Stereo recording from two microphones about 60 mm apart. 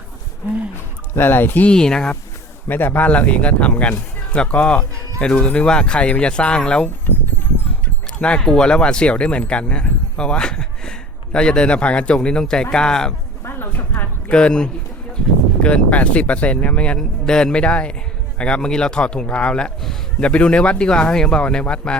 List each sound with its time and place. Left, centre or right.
1.1 s speech: left
1.6 s speech: centre
2.6 s speech: left
3.1 s speech: left
8.4 s speech: centre
13.4 s speech: left
14.3 s speech: centre